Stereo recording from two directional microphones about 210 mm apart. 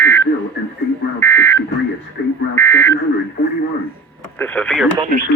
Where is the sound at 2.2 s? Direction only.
50° left (ahead or behind).